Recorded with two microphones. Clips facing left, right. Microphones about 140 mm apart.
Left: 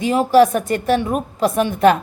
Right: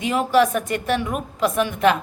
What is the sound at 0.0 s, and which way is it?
Speech, 35° left (ahead or behind).